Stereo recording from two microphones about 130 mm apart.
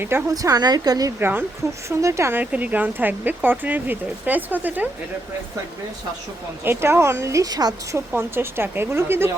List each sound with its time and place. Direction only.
0.0 s speech: 15° right (ahead or behind)
1.2 s speech: 15° right (ahead or behind)
6.7 s speech: 20° right (ahead or behind)